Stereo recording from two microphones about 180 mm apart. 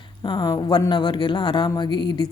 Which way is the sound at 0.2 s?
20° left (ahead or behind).